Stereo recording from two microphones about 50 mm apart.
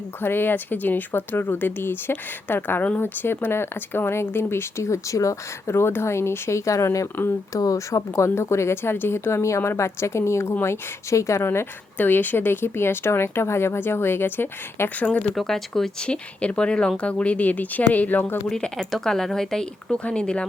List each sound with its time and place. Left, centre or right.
0.2 s speech: left
4.8 s a woman's voice: left
11.9 s speech: left
15.1 s speech: left
15.4 s speech: centre
16.0 s speech: left
18.8 s speech: centre